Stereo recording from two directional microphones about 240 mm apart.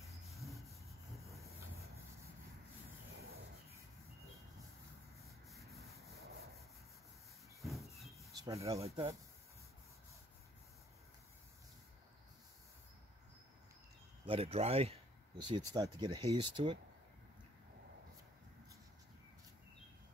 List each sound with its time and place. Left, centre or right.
0.3 s rub: centre
1.3 s vehicle: centre
5.2 s rub: centre
6.1 s wood: right
7.6 s train: centre
8.5 s speech: centre
8.7 s speech: right
14.2 s speech: right